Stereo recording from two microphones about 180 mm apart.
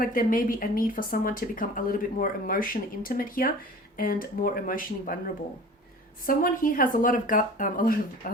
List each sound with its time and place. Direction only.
0.0 s speech: 50° left (ahead or behind)